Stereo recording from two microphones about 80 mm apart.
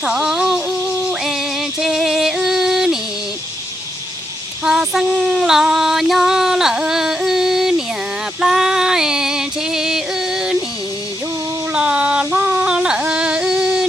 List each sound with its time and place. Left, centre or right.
0.0 s music: centre
4.6 s female singing: centre
8.4 s music: centre
11.7 s a sound: centre